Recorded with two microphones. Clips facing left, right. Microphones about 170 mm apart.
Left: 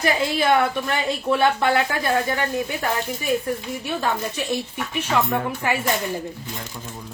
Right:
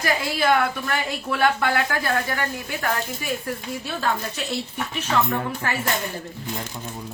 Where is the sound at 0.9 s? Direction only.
25° left (ahead or behind).